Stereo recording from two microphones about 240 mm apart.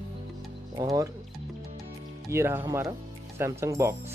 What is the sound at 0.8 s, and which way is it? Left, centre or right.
Speech, centre.